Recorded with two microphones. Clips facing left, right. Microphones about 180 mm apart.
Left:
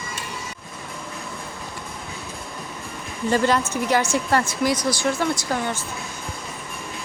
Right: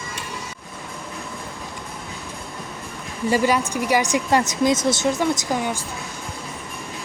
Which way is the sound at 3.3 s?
10° right (ahead or behind).